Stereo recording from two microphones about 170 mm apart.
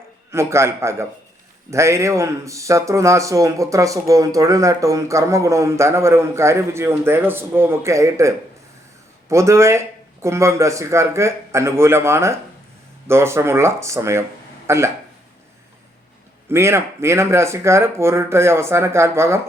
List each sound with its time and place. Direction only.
0.3 s speech: 15° right (ahead or behind)
9.3 s speech: 15° right (ahead or behind)
16.5 s speech: 15° right (ahead or behind)